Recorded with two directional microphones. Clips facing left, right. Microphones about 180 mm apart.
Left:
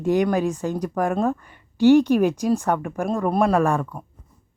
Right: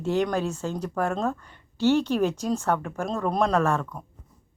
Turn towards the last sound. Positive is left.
turn(degrees=10)  # may be behind; listen again after turning